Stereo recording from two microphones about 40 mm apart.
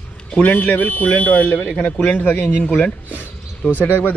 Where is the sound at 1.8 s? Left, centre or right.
Left.